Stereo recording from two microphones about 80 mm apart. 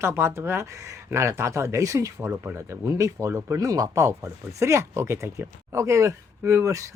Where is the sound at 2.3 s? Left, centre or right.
Right.